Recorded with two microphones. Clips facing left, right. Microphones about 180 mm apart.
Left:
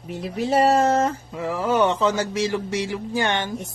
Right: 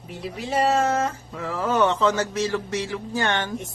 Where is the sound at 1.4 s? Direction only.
15° left (ahead or behind).